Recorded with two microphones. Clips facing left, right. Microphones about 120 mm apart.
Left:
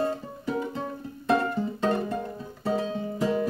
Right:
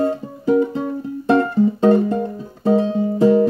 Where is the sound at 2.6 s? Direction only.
25° right (ahead or behind).